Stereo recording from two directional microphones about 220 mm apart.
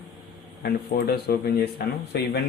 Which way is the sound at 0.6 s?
45° left (ahead or behind).